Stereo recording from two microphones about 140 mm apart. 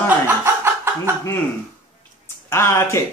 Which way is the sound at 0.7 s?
15° right (ahead or behind).